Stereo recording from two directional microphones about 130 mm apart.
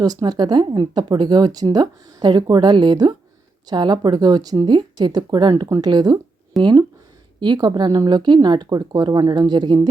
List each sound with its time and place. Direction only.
0.0 s speech: 30° right (ahead or behind)